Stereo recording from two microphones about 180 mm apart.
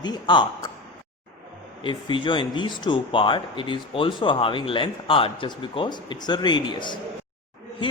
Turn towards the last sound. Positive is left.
turn(degrees=25)  # may be behind; listen again after turning